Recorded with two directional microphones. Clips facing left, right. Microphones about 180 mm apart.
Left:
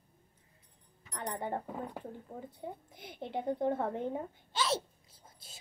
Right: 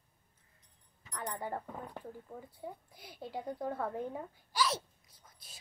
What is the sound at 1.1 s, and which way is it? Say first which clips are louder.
A woman's voice: left 2 dB; 25° left (ahead or behind).